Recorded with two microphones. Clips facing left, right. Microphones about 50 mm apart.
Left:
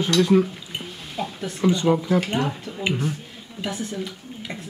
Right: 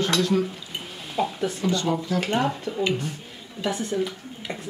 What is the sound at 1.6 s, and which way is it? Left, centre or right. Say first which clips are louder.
Speech: left 7 dB; centre.